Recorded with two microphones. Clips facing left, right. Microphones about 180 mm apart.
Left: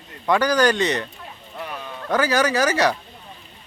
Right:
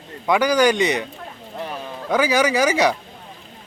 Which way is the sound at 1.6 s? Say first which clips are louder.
Right 3 dB; 30° right (ahead or behind).